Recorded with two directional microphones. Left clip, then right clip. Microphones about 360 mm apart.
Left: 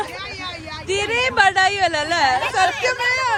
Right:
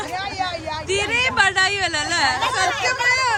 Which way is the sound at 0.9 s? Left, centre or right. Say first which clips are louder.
Left 1 dB; centre.